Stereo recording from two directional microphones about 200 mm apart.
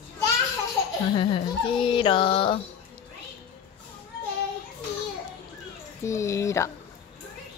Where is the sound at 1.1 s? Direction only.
25° left (ahead or behind).